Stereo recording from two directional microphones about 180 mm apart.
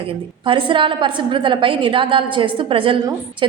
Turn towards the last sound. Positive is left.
turn(degrees=-30)  # may be behind; listen again after turning